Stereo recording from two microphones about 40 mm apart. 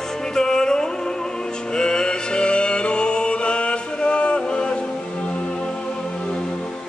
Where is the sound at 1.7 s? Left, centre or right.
Centre.